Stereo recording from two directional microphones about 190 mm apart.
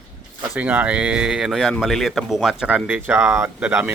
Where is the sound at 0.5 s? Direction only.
10° right (ahead or behind).